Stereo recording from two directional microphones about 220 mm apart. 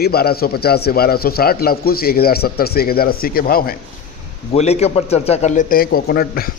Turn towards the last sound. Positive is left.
turn(degrees=45)  # may be behind; listen again after turning